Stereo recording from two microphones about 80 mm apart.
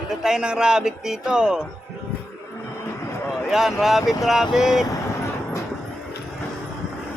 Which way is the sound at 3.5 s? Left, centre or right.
Centre.